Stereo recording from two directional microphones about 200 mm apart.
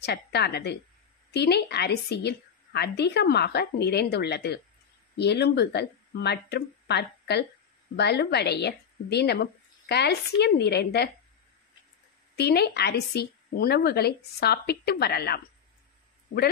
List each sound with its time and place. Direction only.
0.0 s a woman's voice: 55° left (ahead or behind)
12.4 s a woman's voice: 55° left (ahead or behind)